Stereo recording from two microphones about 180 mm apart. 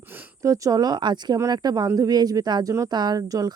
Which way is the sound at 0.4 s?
20° right (ahead or behind).